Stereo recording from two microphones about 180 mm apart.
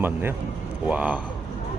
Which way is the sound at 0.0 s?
10° right (ahead or behind).